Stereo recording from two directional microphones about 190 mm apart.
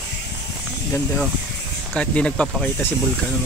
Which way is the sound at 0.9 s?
5° left (ahead or behind).